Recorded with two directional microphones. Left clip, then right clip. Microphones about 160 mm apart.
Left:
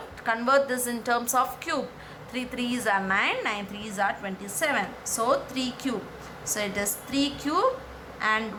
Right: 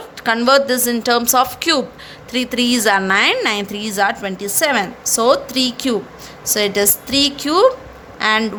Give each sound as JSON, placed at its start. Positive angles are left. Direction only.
{"t": 0.2, "sound": "a woman's voice", "side_deg": -55}